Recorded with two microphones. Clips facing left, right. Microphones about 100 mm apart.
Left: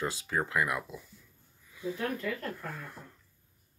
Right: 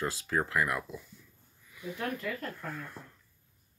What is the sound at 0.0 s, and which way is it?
Speech, 20° left (ahead or behind).